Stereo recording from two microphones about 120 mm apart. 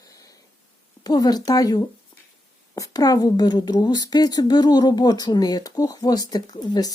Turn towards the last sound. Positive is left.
turn(degrees=35)  # may be behind; listen again after turning